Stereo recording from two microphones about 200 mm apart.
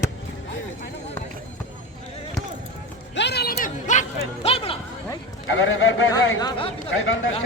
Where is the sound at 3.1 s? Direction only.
55° left (ahead or behind); by 4.7 s 30° left (ahead or behind).